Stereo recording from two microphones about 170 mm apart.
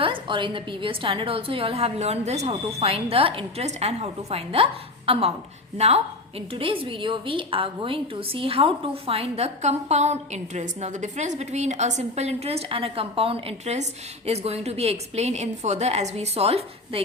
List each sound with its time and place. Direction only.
0.0 s a woman's voice: 30° right (ahead or behind)